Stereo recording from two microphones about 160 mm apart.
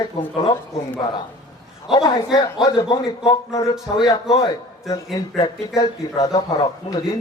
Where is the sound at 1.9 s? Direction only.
25° left (ahead or behind).